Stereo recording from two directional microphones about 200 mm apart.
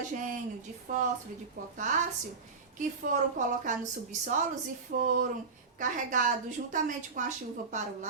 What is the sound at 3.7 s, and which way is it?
A woman's voice, 40° right (ahead or behind).